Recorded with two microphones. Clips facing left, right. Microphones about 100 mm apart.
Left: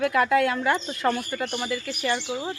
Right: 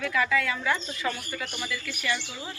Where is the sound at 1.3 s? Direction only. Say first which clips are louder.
Left 6 dB; 40° left (ahead or behind).